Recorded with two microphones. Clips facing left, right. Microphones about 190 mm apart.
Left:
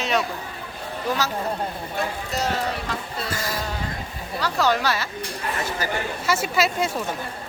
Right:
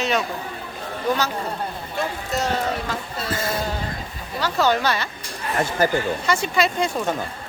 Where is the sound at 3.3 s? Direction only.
25° right (ahead or behind).